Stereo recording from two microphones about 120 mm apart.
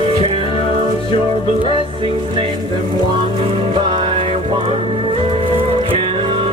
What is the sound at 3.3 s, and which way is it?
Music, 45° right (ahead or behind).